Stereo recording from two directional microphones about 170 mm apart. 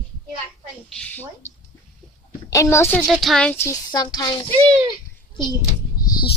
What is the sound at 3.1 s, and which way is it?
Speech, centre (ahead or behind).